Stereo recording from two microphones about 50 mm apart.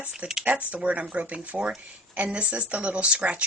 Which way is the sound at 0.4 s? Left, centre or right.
Right.